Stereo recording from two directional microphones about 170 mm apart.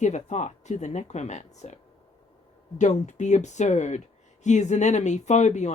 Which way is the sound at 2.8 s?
45° left (ahead or behind).